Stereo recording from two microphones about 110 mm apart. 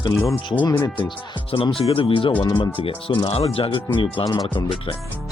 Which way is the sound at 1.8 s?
60° left (ahead or behind).